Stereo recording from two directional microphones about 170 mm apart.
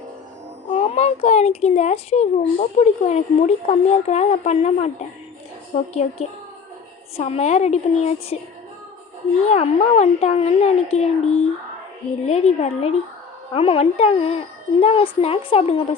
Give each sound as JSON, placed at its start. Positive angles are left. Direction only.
{"t": 0.8, "sound": "speech", "side_deg": 40}
{"t": 7.2, "sound": "speech", "side_deg": 40}
{"t": 9.4, "sound": "speech", "side_deg": 40}